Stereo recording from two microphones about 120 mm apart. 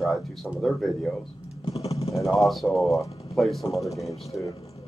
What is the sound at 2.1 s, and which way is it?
Speech, centre (ahead or behind).